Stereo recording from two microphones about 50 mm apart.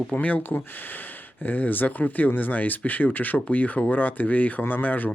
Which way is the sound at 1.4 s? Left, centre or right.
Left.